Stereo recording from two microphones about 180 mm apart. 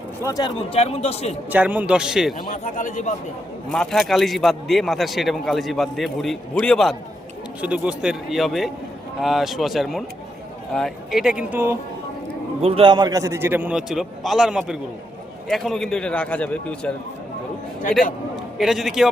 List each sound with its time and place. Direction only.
0.3 s a man's voice: 25° left (ahead or behind)
1.5 s a man's voice: 10° right (ahead or behind)
2.5 s a man's voice: 45° left (ahead or behind)
3.7 s a man's voice: 5° left (ahead or behind); by 11.8 s 10° right (ahead or behind)
12.6 s a man's voice: 30° right (ahead or behind); by 16.9 s 5° left (ahead or behind)
18.5 s a man's voice: centre (ahead or behind)